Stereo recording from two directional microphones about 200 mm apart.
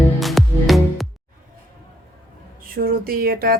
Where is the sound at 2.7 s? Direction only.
45° right (ahead or behind).